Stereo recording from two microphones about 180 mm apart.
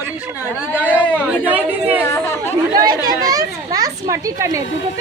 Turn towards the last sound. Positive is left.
turn(degrees=-15)  # may be behind; listen again after turning